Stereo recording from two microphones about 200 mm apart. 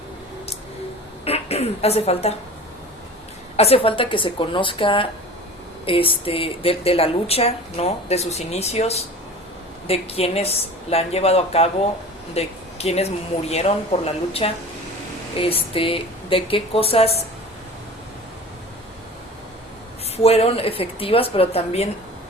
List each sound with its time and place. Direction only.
1.2 s speech: 30° left (ahead or behind)
3.6 s speech: 30° left (ahead or behind)
20.1 s speech: 30° left (ahead or behind)